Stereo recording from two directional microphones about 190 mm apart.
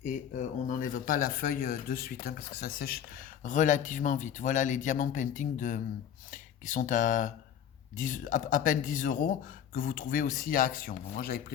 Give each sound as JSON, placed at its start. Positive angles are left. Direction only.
{"t": 0.0, "sound": "speech", "side_deg": 45}